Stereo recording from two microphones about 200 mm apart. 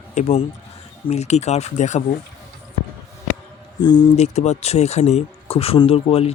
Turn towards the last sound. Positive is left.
turn(degrees=30)  # may be behind; listen again after turning